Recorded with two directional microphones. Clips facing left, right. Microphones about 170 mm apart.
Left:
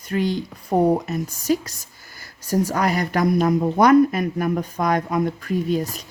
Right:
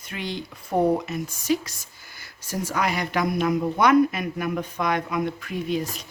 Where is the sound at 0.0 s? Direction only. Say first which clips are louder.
Left 9 dB; 40° left (ahead or behind).